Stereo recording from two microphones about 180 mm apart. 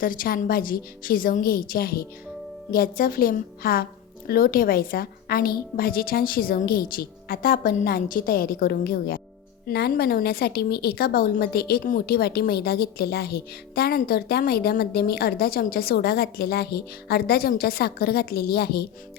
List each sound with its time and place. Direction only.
0.0 s a woman's voice: 50° left (ahead or behind)